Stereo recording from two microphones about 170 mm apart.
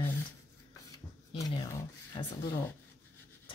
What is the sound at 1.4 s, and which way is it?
Speech, 20° left (ahead or behind).